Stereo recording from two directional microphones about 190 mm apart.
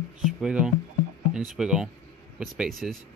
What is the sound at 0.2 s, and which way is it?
Speech, 5° right (ahead or behind).